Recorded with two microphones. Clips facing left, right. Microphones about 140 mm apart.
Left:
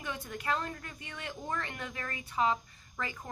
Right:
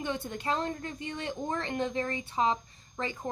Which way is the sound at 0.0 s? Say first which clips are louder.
Right 5 dB; 30° right (ahead or behind).